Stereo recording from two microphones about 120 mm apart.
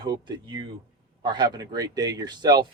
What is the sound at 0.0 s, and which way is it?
Speech, 40° right (ahead or behind).